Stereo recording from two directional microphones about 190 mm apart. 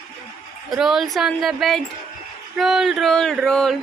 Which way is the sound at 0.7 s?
Centre (ahead or behind).